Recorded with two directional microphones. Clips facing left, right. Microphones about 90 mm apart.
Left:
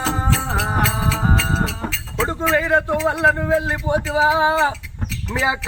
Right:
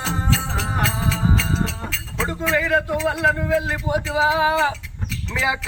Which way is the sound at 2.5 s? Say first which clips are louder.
Left 2 dB; 30° left (ahead or behind).